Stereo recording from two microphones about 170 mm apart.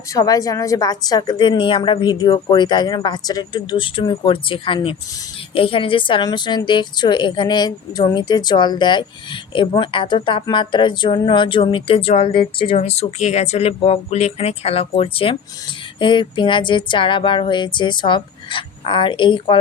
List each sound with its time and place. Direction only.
0.1 s a woman's voice: 20° left (ahead or behind)